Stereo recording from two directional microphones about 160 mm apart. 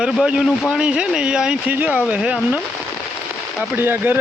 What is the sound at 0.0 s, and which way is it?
Speech, 5° right (ahead or behind).